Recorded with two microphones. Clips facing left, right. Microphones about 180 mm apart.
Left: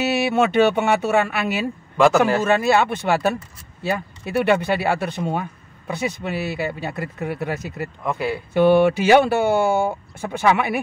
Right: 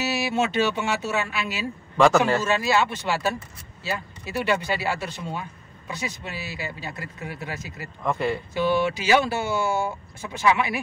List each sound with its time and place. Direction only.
0.0 s speech: 60° left (ahead or behind)
2.0 s speech: centre (ahead or behind)
2.4 s speech: 55° left (ahead or behind)
8.0 s speech: 5° left (ahead or behind)
8.5 s speech: 60° left (ahead or behind)